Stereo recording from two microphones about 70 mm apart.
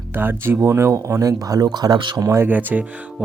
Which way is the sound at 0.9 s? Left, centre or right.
Right.